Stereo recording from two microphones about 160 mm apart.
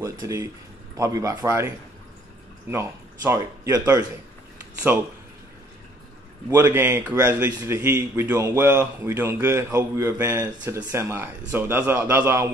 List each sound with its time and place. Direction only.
0.0 s speech: 20° right (ahead or behind)
2.7 s a man's voice: 15° right (ahead or behind)
6.5 s a man's voice: 15° right (ahead or behind)